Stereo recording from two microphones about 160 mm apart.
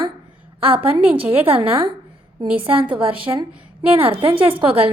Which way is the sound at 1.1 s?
35° right (ahead or behind).